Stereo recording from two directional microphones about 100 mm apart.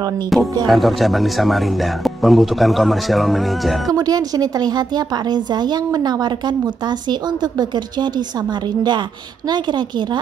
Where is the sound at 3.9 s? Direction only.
40° right (ahead or behind).